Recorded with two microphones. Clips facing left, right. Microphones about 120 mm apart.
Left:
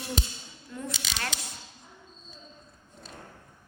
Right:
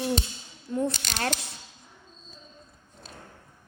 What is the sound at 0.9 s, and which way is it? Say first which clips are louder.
Speech: right 1 dB; centre (ahead or behind).